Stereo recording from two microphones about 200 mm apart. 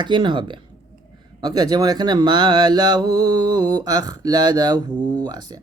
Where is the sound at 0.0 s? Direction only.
25° right (ahead or behind).